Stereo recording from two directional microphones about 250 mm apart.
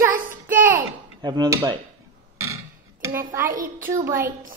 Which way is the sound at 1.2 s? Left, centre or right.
Centre.